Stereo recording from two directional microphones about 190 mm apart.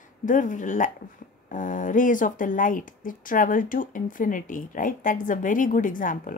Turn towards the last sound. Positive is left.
turn(degrees=45)  # may be behind; listen again after turning